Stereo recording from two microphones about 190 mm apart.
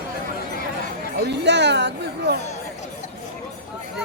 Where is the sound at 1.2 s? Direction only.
65° right (ahead or behind).